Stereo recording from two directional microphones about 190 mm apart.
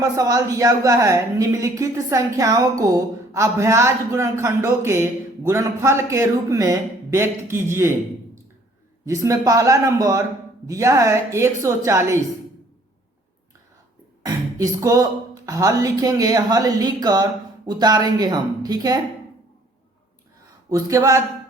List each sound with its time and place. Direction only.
0.0 s a woman's voice: 20° right (ahead or behind)
9.0 s a woman's voice: 15° right (ahead or behind)
14.3 s speech: 20° right (ahead or behind)
20.7 s a woman's voice: 15° right (ahead or behind)